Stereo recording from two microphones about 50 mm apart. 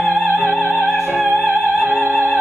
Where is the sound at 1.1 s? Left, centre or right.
Right.